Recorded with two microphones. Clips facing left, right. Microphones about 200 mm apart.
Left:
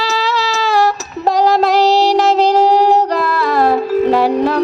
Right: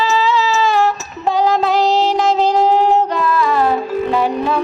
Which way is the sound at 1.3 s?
40° left (ahead or behind).